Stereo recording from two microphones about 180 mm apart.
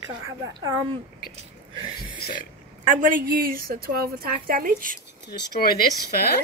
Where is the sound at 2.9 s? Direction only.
45° right (ahead or behind).